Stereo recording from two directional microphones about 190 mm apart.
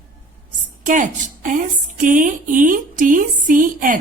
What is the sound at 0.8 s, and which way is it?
A woman's voice, 40° right (ahead or behind).